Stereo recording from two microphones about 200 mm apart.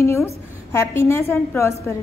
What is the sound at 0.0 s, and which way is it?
A woman's voice, 15° left (ahead or behind).